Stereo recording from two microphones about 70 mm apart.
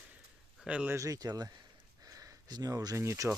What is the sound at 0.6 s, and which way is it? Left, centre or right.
Speech, centre.